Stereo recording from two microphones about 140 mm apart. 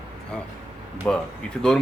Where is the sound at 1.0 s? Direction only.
10° left (ahead or behind).